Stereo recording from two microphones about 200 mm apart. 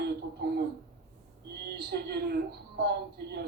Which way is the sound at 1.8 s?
50° right (ahead or behind).